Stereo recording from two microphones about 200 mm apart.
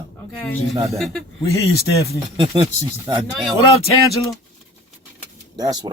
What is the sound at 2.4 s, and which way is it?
Speech, 25° right (ahead or behind).